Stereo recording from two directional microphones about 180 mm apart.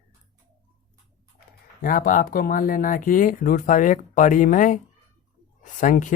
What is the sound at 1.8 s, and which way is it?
Speech, 50° left (ahead or behind).